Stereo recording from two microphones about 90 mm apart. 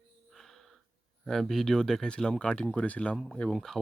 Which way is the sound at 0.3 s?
Centre (ahead or behind).